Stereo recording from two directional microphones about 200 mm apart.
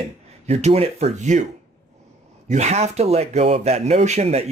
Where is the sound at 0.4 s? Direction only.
35° right (ahead or behind).